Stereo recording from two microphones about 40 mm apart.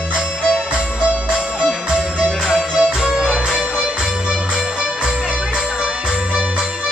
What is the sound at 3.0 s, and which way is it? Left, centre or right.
Music, centre.